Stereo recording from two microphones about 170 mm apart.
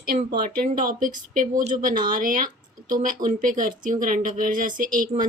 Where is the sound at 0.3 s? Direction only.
60° right (ahead or behind).